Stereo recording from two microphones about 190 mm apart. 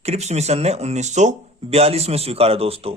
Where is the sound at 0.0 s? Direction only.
35° right (ahead or behind).